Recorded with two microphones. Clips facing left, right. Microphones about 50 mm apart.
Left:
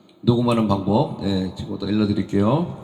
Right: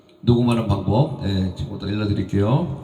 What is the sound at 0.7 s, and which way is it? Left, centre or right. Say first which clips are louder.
Speech: left 1 dB; centre.